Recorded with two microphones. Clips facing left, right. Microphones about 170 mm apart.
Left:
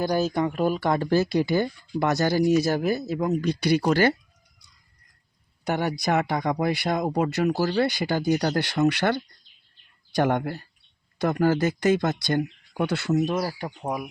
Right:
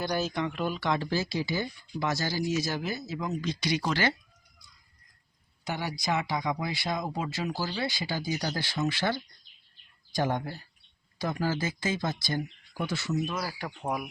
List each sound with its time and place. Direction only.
0.0 s speech: 40° left (ahead or behind)
5.6 s speech: 60° left (ahead or behind); by 13.6 s 40° left (ahead or behind)
13.6 s speech: 15° left (ahead or behind)